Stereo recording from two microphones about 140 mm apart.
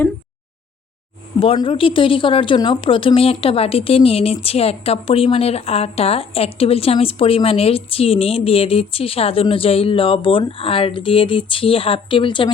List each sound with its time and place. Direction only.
1.4 s speech: 40° left (ahead or behind)